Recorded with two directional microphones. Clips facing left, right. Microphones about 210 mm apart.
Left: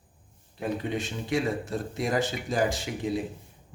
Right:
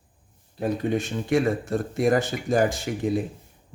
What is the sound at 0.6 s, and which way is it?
Speech, 45° right (ahead or behind).